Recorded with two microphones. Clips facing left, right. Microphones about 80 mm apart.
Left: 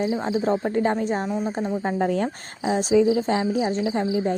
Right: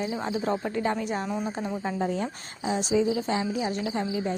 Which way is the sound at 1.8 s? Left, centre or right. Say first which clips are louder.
Left 5 dB; left.